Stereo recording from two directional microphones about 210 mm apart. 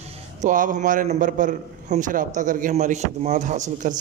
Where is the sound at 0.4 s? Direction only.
40° right (ahead or behind).